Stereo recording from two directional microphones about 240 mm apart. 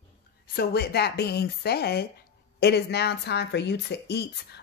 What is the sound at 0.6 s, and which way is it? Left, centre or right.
Speech, left.